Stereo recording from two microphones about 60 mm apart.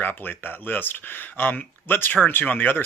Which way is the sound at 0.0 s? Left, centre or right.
Left.